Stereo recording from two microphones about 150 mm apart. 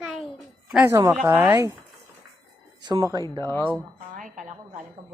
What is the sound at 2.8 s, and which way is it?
Speech, 30° right (ahead or behind).